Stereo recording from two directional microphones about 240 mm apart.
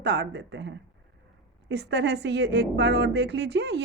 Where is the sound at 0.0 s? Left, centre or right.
Right.